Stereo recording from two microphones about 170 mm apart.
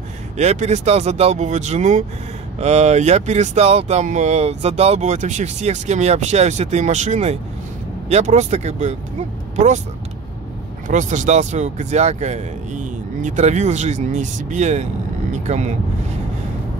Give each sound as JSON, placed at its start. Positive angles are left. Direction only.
{"t": 0.4, "sound": "speech", "side_deg": -40}
{"t": 10.9, "sound": "speech", "side_deg": -45}